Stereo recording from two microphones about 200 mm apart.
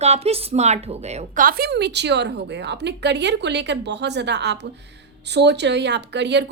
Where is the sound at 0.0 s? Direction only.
30° right (ahead or behind).